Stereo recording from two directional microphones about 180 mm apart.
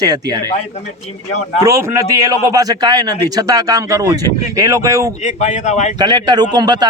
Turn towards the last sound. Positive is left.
turn(degrees=-20)  # may be behind; listen again after turning